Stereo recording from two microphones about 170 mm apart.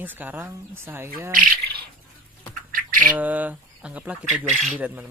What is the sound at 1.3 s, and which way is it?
Speech, 55° right (ahead or behind).